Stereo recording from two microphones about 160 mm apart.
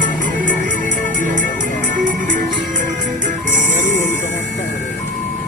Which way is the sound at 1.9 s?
55° right (ahead or behind).